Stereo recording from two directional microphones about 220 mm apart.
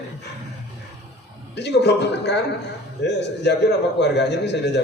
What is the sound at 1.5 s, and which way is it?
A man's voice, 50° left (ahead or behind).